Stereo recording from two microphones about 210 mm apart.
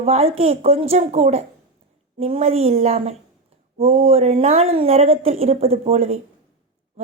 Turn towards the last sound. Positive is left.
turn(degrees=-30)  # may be behind; listen again after turning